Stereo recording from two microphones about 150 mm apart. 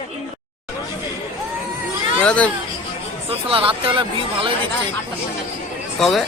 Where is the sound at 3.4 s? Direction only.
35° right (ahead or behind).